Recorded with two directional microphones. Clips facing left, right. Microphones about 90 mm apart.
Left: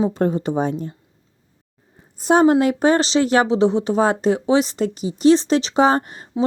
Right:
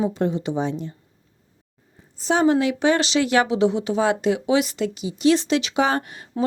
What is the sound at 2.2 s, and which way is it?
Speech, 45° left (ahead or behind).